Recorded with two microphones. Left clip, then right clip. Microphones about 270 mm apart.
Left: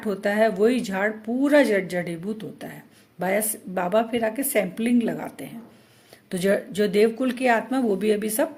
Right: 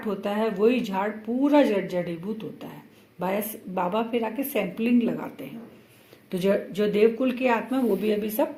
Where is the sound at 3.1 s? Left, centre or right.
Left.